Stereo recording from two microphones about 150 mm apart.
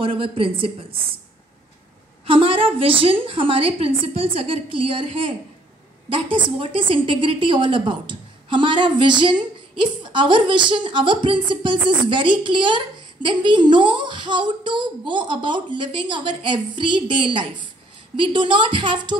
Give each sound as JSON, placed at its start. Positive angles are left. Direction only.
{"t": 0.0, "sound": "a woman's voice", "side_deg": -35}
{"t": 2.2, "sound": "a woman's voice", "side_deg": -35}